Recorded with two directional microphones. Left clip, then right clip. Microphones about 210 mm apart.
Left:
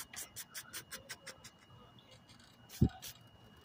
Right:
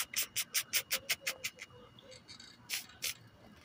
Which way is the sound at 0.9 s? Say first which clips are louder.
Right 13 dB; 10° left (ahead or behind).